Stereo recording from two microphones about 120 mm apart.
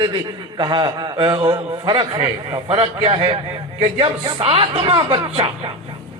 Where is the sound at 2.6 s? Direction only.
55° right (ahead or behind).